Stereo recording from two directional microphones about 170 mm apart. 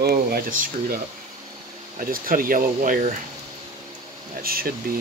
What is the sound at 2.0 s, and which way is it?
Speech, 55° right (ahead or behind).